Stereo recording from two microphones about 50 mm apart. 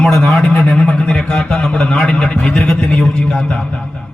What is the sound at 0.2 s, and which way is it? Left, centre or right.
Speech, centre.